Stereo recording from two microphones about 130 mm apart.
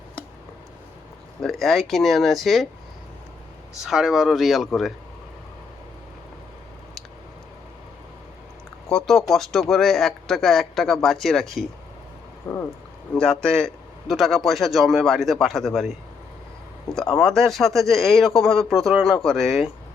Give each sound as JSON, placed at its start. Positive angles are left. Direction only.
{"t": 1.4, "sound": "speech", "side_deg": 0}
{"t": 3.8, "sound": "speech", "side_deg": -5}
{"t": 8.9, "sound": "speech", "side_deg": 5}
{"t": 12.4, "sound": "a sound", "side_deg": 25}
{"t": 13.1, "sound": "speech", "side_deg": 5}
{"t": 17.2, "sound": "speech", "side_deg": 0}